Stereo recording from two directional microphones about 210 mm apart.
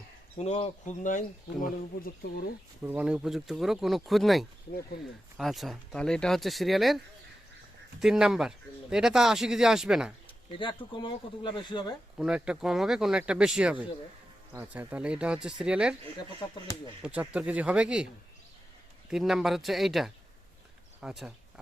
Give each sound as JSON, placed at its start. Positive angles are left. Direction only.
{"t": 0.3, "sound": "speech", "side_deg": 30}
{"t": 2.8, "sound": "speech", "side_deg": -10}
{"t": 8.0, "sound": "speech", "side_deg": 0}
{"t": 10.6, "sound": "speech", "side_deg": 25}
{"t": 12.1, "sound": "speech", "side_deg": -5}
{"t": 17.0, "sound": "speech", "side_deg": -5}
{"t": 19.1, "sound": "speech", "side_deg": 0}